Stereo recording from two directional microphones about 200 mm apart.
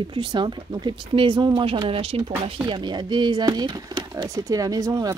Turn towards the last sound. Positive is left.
turn(degrees=-15)  # may be behind; listen again after turning